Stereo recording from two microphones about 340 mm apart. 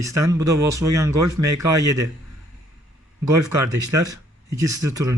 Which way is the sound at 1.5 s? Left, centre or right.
Right.